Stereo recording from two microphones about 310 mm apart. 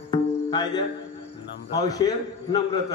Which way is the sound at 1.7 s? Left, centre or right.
Centre.